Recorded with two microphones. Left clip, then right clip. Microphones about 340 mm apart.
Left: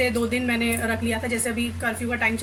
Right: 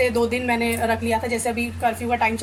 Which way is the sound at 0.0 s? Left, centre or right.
Centre.